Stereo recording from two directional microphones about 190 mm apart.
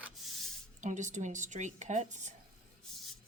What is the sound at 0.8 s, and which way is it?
A woman's voice, 40° right (ahead or behind).